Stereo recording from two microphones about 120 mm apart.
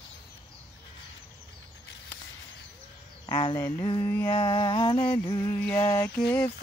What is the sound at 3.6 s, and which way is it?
Speech, 20° left (ahead or behind).